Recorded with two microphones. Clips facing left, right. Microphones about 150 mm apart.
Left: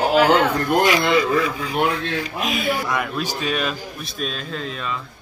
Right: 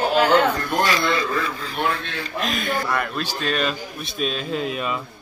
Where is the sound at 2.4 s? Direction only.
10° left (ahead or behind).